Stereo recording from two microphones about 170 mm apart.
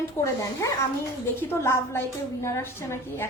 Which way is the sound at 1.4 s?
15° left (ahead or behind).